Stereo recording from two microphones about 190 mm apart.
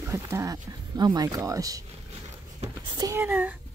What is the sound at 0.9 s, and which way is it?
Speech, 20° right (ahead or behind).